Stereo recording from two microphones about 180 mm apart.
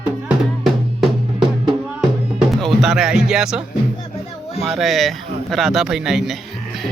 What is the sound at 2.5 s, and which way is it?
Speech, centre (ahead or behind).